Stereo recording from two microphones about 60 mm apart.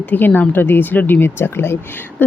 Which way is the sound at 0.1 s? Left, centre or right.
Left.